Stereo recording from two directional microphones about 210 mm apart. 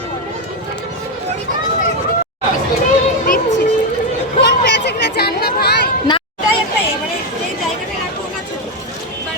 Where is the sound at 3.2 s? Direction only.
40° left (ahead or behind).